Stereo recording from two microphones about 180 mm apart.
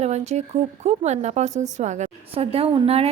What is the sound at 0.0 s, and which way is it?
A woman's voice, 40° right (ahead or behind).